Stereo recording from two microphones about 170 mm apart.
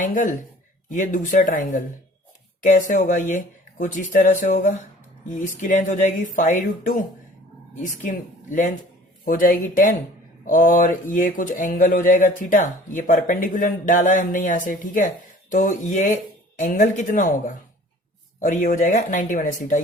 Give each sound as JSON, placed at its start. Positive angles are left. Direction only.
{"t": 0.0, "sound": "speech", "side_deg": 50}